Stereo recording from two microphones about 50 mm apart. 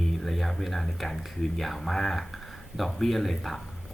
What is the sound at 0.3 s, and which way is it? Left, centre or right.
Speech, centre.